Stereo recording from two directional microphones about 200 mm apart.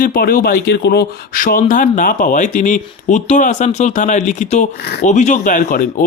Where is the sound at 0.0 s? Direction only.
45° left (ahead or behind).